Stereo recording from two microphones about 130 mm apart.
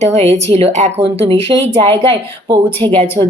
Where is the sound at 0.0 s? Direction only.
55° right (ahead or behind).